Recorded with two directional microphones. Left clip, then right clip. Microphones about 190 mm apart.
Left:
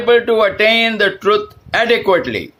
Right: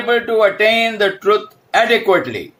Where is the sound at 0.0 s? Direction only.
40° left (ahead or behind).